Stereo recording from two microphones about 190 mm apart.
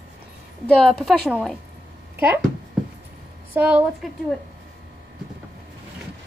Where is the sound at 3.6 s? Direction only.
10° right (ahead or behind).